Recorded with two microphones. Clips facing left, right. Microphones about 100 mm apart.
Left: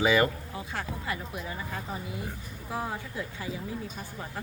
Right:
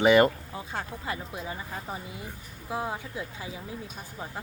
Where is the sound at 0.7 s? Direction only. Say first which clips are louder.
Even; 25° right (ahead or behind).